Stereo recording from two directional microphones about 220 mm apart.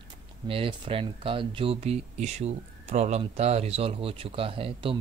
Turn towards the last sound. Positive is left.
turn(degrees=-25)  # may be behind; listen again after turning